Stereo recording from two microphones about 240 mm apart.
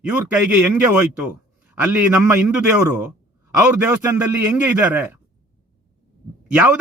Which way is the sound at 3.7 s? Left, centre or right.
Centre.